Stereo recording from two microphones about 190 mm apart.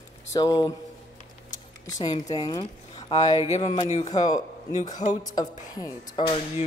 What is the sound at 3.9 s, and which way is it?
Speech, 35° left (ahead or behind).